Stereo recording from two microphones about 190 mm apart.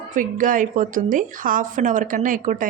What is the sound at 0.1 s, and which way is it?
A woman's voice, 45° right (ahead or behind).